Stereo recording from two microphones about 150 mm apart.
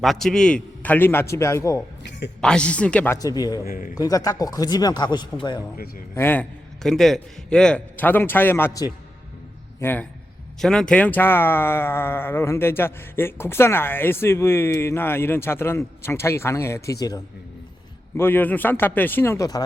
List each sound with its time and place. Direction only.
0.0 s speech: centre (ahead or behind); by 1.8 s 20° left (ahead or behind)
2.4 s speech: 5° left (ahead or behind)
3.2 s speech: 25° left (ahead or behind)
3.7 s a man's voice: 65° left (ahead or behind)
3.9 s speech: 25° left (ahead or behind)
6.1 s speech: 15° left (ahead or behind)
9.8 s speech: 10° left (ahead or behind)
18.2 s speech: 15° left (ahead or behind)